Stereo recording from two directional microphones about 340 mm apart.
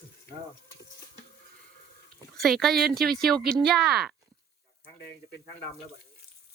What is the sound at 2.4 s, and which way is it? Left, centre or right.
Speech, centre.